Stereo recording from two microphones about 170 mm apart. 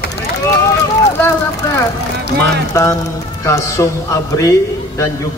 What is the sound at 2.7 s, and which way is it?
A man's voice, 20° left (ahead or behind).